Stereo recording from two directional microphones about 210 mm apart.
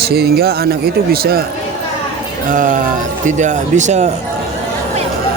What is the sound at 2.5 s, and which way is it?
Speech, 40° right (ahead or behind).